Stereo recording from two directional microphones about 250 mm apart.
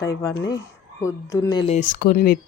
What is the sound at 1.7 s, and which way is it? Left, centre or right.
Speech, left.